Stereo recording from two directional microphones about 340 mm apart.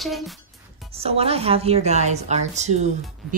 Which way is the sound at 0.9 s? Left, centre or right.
Centre.